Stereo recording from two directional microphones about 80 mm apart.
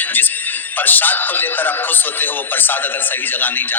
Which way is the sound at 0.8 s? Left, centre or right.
Left.